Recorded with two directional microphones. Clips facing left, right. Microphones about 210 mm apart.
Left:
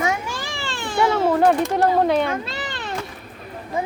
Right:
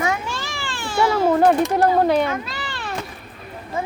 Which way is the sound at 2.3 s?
25° left (ahead or behind).